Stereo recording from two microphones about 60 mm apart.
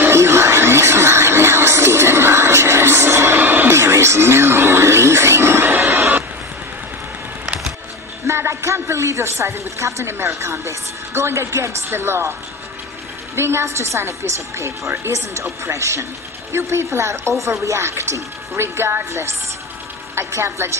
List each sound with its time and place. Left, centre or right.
0.0 s music: right
3.7 s music: right
8.3 s a woman's voice: right
13.4 s a woman's voice: right